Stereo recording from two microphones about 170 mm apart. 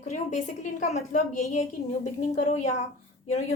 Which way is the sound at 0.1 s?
45° left (ahead or behind).